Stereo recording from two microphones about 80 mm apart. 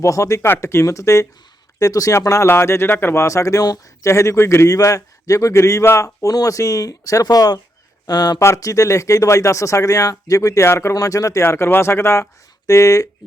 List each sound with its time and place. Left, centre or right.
0.0 s speech: left
0.4 s a man's voice: left
4.0 s a man's voice: left
8.4 s a man's voice: left
10.9 s speech: left
11.4 s a man's voice: left